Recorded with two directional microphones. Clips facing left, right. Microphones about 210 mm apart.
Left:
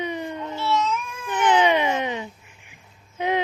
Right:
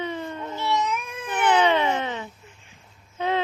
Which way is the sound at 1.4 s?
20° left (ahead or behind).